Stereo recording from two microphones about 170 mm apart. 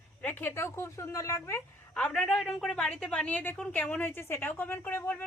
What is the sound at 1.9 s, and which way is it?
A woman's voice, 5° left (ahead or behind).